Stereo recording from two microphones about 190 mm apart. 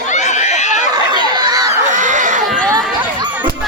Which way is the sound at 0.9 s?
20° right (ahead or behind).